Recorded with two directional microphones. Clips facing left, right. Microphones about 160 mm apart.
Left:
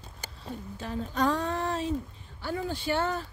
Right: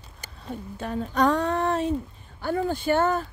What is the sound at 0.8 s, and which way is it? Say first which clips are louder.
Speech: right 5 dB; 60° right (ahead or behind).